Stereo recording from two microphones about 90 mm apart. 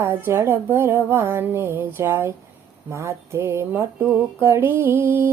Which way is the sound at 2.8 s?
30° right (ahead or behind).